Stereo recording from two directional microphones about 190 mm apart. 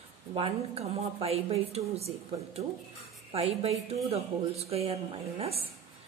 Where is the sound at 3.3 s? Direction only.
30° right (ahead or behind).